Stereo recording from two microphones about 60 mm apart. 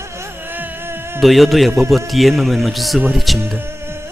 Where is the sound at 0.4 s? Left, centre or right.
Right.